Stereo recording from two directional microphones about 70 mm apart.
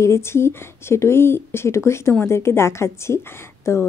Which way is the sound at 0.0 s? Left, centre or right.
Left.